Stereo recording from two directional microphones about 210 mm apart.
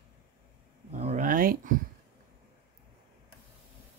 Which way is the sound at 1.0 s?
35° right (ahead or behind).